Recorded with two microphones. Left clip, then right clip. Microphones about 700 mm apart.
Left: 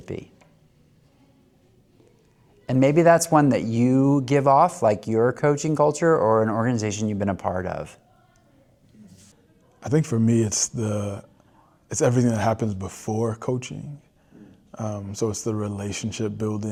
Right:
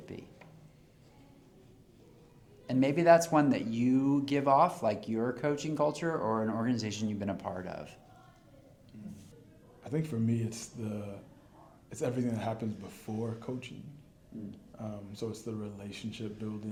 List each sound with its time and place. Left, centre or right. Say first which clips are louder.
0.0 s speech: left 12 dB; left
2.6 s speech: left 8 dB; left
9.8 s speech: left 12 dB; left
14.8 s speech: left 13 dB; left